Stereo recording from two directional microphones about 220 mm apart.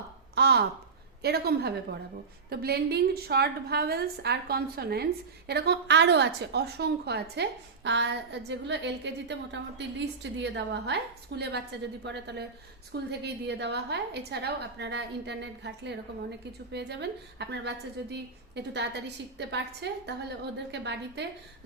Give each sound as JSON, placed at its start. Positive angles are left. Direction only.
{"t": 0.3, "sound": "a woman's voice", "side_deg": -50}